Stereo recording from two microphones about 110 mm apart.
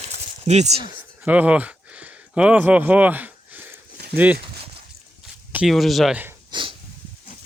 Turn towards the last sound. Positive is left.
turn(degrees=-45)  # may be behind; listen again after turning